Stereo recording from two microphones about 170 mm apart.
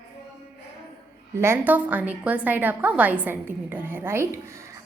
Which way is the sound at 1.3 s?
15° right (ahead or behind).